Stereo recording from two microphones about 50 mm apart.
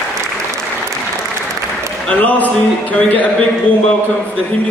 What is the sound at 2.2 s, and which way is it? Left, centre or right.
Speech, left.